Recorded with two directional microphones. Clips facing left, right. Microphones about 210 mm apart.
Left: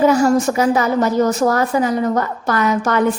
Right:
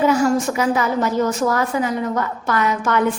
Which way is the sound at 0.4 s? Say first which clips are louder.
Left 3 dB; 40° left (ahead or behind).